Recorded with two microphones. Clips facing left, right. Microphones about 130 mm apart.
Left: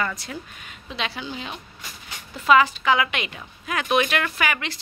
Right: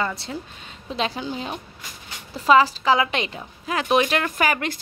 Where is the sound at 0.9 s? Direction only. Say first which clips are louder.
Right 4 dB; 40° right (ahead or behind).